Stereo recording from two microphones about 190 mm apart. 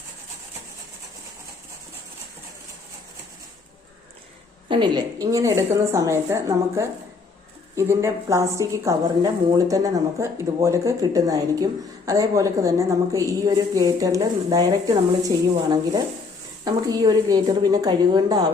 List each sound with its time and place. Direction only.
4.7 s speech: 25° right (ahead or behind)
16.6 s a woman's voice: 20° right (ahead or behind)